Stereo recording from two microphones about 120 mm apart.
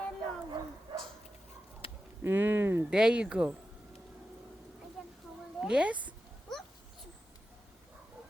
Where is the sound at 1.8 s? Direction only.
50° left (ahead or behind).